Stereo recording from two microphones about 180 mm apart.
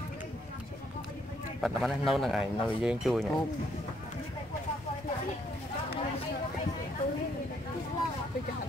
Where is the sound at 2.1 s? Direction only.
Centre (ahead or behind).